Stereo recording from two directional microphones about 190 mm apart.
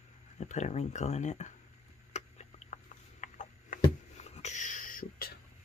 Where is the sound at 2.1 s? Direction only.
40° left (ahead or behind).